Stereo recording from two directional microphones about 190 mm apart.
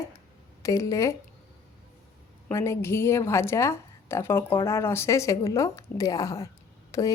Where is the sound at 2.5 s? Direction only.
15° left (ahead or behind).